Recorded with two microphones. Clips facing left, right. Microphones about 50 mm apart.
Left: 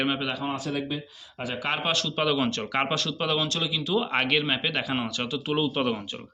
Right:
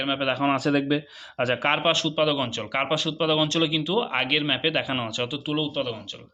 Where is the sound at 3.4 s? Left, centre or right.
Right.